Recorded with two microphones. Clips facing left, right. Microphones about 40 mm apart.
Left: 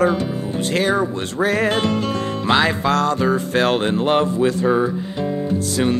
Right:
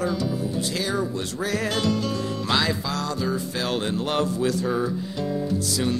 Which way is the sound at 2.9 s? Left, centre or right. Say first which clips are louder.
Left 9 dB; left.